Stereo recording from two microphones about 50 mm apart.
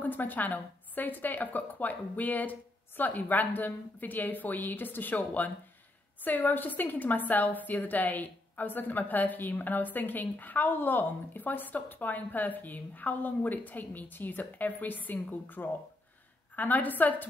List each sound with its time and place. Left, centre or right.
0.0 s a woman's voice: left